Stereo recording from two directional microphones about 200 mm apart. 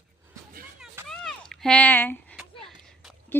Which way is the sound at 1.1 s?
5° left (ahead or behind).